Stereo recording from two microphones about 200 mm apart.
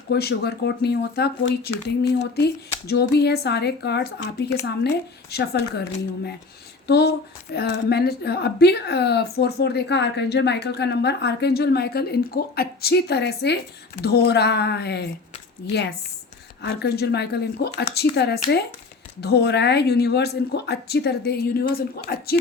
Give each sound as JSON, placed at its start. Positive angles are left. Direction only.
{"t": 0.1, "sound": "a woman's voice", "side_deg": 55}
{"t": 6.8, "sound": "a woman's voice", "side_deg": 55}